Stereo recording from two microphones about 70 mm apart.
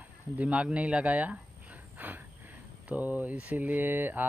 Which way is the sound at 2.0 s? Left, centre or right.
Right.